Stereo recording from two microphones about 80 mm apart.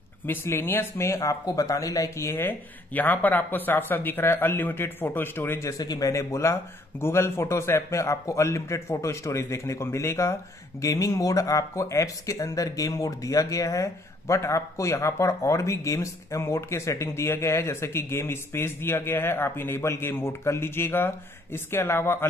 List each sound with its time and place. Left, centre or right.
0.3 s speech: left
1.4 s speech: left